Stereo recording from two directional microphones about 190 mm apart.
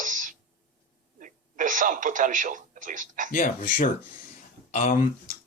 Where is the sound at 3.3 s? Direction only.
45° left (ahead or behind).